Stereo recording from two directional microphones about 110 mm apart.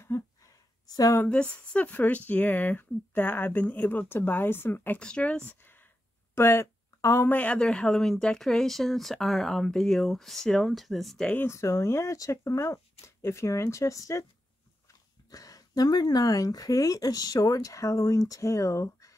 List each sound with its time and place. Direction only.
0.1 s speech: 25° left (ahead or behind)
0.8 s speech: 35° left (ahead or behind)
1.1 s speech: 15° left (ahead or behind)
6.3 s a sound: 20° left (ahead or behind)
7.2 s speech: 15° left (ahead or behind)
11.3 s speech: 25° left (ahead or behind)
15.3 s speech: 35° left (ahead or behind)